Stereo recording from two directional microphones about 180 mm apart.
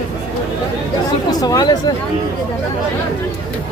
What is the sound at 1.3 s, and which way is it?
Speech, 20° left (ahead or behind).